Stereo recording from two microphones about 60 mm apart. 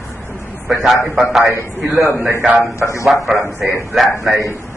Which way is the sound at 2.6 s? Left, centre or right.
Left.